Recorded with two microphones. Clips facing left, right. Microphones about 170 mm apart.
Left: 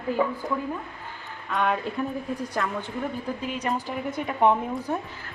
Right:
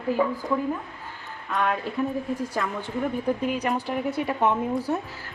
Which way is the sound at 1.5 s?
Centre (ahead or behind).